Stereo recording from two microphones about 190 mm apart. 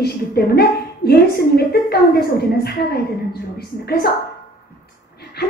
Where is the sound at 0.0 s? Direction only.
55° left (ahead or behind).